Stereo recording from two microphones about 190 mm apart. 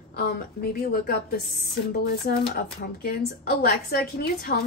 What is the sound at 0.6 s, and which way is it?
A woman's voice, 55° left (ahead or behind).